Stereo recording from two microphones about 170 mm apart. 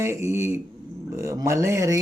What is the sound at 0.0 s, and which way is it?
Speech, 15° right (ahead or behind).